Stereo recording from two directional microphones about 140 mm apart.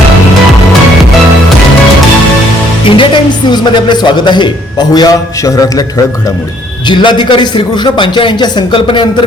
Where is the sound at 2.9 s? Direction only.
35° left (ahead or behind).